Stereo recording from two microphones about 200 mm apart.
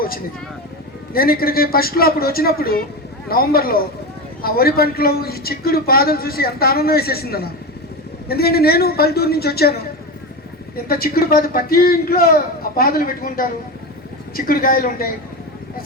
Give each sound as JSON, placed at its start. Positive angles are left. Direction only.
{"t": 1.1, "sound": "a man's voice", "side_deg": 45}
{"t": 10.8, "sound": "a man's voice", "side_deg": 50}